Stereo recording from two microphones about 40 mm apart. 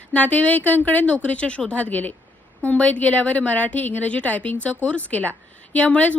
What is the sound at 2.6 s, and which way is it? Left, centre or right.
A woman's voice, left.